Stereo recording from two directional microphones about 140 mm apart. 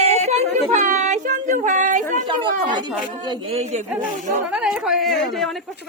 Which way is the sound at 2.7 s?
30° right (ahead or behind).